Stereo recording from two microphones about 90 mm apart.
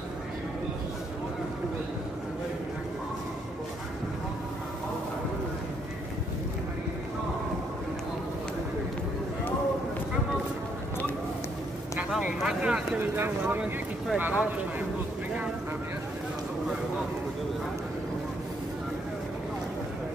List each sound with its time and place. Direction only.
12.1 s speech: 5° right (ahead or behind)
13.0 s speech: 25° right (ahead or behind)
13.4 s speech: 15° right (ahead or behind)